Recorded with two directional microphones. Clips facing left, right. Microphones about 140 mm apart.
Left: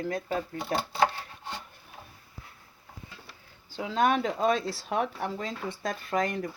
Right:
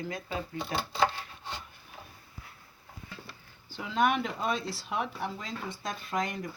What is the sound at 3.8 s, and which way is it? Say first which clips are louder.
Speech: left 2 dB; 35° left (ahead or behind).